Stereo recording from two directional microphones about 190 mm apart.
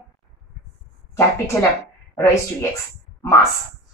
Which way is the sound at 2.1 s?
15° left (ahead or behind).